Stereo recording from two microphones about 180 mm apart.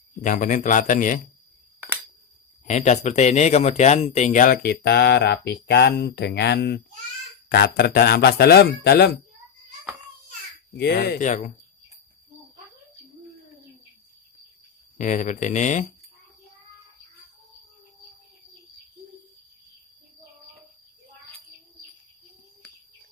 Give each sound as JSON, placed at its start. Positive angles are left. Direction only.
{"t": 0.2, "sound": "a man's voice", "side_deg": 45}
{"t": 2.6, "sound": "speech", "side_deg": 40}
{"t": 4.8, "sound": "speech", "side_deg": 65}
{"t": 10.7, "sound": "speech", "side_deg": 60}
{"t": 11.2, "sound": "speech", "side_deg": 40}
{"t": 15.0, "sound": "a man's voice", "side_deg": 45}